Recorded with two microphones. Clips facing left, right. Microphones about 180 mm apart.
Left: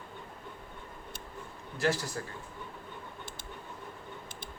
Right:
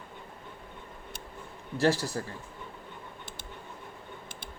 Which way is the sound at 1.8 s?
35° right (ahead or behind).